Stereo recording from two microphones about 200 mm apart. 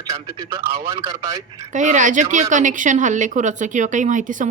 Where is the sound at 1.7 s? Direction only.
40° right (ahead or behind).